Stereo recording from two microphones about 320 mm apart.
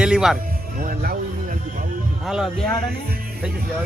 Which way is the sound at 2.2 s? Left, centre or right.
Centre.